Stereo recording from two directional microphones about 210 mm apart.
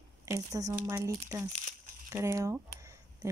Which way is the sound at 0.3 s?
15° right (ahead or behind).